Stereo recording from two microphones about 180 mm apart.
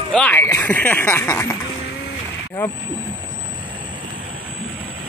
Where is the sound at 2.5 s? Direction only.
15° left (ahead or behind).